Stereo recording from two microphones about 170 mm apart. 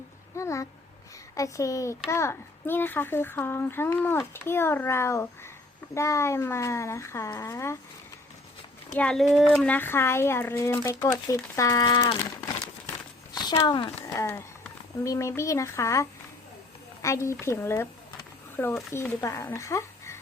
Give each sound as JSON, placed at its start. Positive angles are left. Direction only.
{"t": 0.3, "sound": "speech", "side_deg": 15}
{"t": 9.0, "sound": "speech", "side_deg": 5}
{"t": 13.3, "sound": "speech", "side_deg": 25}
{"t": 14.0, "sound": "a woman's voice", "side_deg": 15}
{"t": 18.9, "sound": "speech", "side_deg": 15}